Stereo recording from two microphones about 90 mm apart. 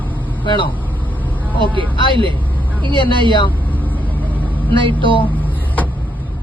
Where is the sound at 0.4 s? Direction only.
60° left (ahead or behind).